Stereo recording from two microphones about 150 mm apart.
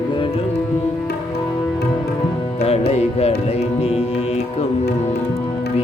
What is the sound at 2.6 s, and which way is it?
Music, 45° left (ahead or behind).